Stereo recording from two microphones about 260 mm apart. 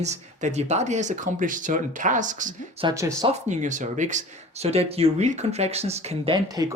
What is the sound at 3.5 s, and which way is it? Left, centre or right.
Speech, right.